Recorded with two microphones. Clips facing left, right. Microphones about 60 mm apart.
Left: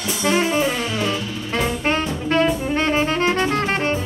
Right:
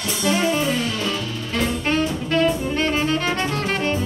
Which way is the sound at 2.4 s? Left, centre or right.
Left.